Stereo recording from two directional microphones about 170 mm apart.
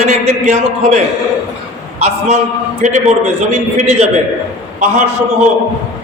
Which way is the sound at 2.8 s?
45° right (ahead or behind).